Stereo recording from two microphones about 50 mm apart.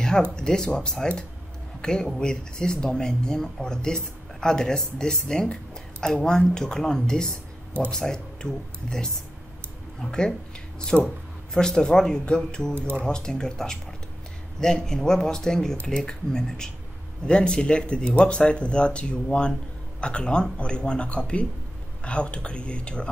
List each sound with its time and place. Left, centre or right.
0.0 s speech: centre
10.9 s speech: centre
12.7 s speech: right
13.0 s speech: centre